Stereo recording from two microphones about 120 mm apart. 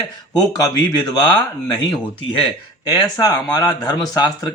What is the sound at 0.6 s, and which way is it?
Speech, 30° left (ahead or behind).